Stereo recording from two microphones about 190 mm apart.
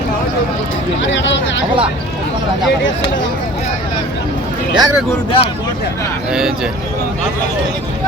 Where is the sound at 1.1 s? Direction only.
75° left (ahead or behind).